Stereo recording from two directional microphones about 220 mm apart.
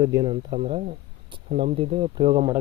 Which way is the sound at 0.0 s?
15° right (ahead or behind).